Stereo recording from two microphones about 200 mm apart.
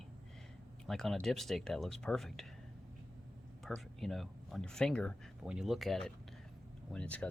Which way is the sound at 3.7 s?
Centre (ahead or behind).